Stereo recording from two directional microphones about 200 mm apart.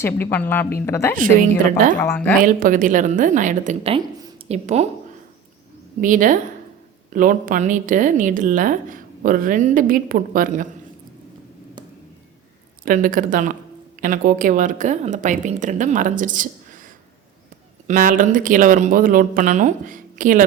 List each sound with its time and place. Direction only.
0.0 s speech: 10° left (ahead or behind)
2.4 s a woman's voice: 45° right (ahead or behind)
6.0 s a woman's voice: 40° right (ahead or behind)
12.8 s a woman's voice: 40° right (ahead or behind)